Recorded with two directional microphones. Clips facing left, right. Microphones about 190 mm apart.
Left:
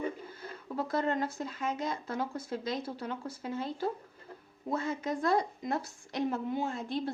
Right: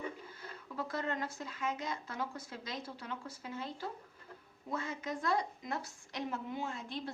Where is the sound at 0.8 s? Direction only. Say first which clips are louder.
Left 7 dB; 35° left (ahead or behind).